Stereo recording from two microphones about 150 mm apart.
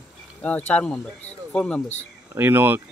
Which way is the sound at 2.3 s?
15° right (ahead or behind).